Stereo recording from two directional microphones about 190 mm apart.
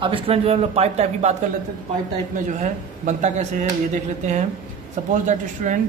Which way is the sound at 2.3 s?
40° right (ahead or behind).